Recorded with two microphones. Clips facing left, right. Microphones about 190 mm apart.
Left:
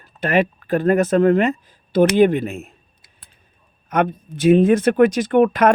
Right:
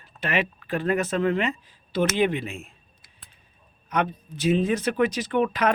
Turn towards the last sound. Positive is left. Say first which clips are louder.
# left 8 dB
turn(degrees=50)  # may be behind; listen again after turning